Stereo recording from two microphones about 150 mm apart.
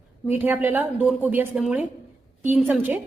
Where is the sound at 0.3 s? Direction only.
10° right (ahead or behind).